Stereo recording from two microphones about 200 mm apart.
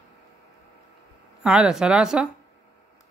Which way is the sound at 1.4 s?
5° right (ahead or behind).